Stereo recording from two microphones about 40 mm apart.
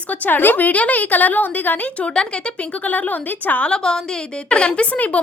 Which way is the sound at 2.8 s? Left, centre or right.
Left.